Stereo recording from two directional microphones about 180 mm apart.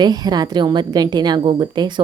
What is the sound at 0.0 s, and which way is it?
Speech, 20° right (ahead or behind).